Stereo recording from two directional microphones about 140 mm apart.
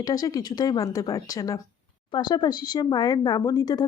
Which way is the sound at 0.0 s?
25° left (ahead or behind).